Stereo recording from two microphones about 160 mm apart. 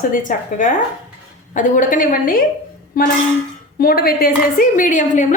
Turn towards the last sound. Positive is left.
turn(degrees=55)  # may be behind; listen again after turning